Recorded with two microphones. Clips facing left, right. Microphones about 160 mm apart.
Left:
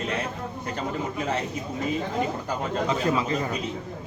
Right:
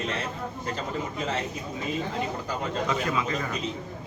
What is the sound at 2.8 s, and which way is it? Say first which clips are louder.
Speech: left 5 dB; 30° left (ahead or behind).